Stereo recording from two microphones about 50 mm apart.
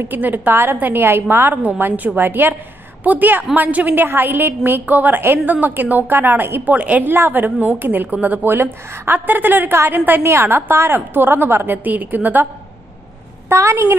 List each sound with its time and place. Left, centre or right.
0.1 s a woman's voice: right
6.7 s a woman's voice: right
7.1 s a woman's voice: right
8.5 s a woman's voice: right
10.2 s a woman's voice: right
13.5 s a woman's voice: right